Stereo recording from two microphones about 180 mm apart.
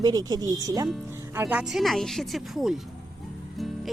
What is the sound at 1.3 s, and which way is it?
Speech, 10° right (ahead or behind).